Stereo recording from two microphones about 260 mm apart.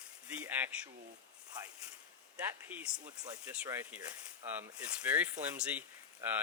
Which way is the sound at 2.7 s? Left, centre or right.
Centre.